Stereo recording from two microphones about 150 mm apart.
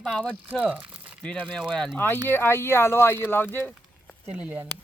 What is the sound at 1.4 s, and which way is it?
Speech, 5° left (ahead or behind).